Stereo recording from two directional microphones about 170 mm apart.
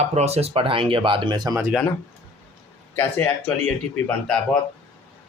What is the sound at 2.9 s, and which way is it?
Speech, 10° left (ahead or behind).